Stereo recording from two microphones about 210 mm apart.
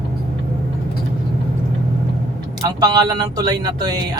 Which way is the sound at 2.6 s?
20° right (ahead or behind).